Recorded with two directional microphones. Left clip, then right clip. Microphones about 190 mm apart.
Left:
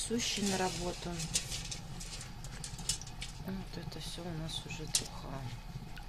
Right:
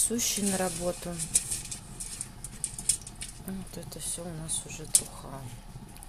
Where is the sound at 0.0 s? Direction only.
20° right (ahead or behind).